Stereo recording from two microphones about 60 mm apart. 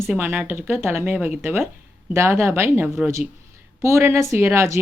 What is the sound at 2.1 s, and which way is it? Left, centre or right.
Speech, right.